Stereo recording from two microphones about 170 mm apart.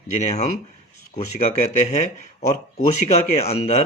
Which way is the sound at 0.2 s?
40° left (ahead or behind).